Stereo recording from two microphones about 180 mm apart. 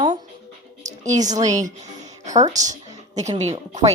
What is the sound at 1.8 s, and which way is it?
Music, 40° right (ahead or behind).